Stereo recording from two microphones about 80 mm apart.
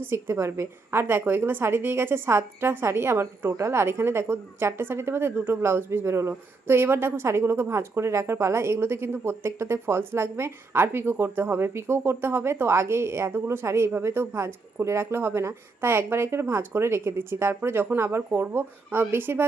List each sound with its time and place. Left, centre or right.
0.0 s a woman's voice: right